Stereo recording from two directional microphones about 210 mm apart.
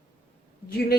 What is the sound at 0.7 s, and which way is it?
Speech, 45° left (ahead or behind).